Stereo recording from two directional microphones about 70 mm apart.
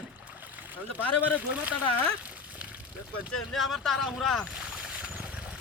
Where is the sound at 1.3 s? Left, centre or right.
Centre.